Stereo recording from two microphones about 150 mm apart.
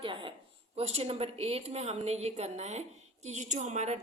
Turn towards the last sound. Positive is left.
turn(degrees=-50)  # may be behind; listen again after turning